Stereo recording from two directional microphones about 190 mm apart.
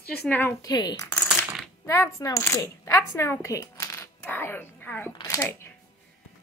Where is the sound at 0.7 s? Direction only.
20° left (ahead or behind).